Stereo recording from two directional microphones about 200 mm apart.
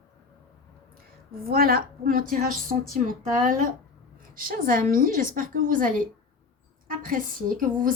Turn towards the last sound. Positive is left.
turn(degrees=-45)  # may be behind; listen again after turning